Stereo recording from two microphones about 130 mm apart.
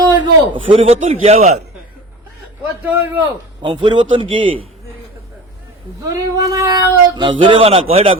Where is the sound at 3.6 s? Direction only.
40° right (ahead or behind).